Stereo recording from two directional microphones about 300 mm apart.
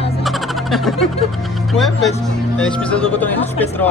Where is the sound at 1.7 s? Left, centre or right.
Centre.